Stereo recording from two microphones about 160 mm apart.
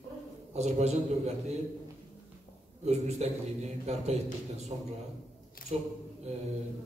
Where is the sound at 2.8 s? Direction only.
45° right (ahead or behind).